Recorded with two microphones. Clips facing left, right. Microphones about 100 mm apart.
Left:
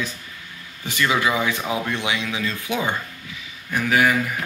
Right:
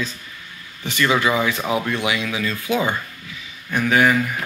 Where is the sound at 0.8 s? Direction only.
15° left (ahead or behind).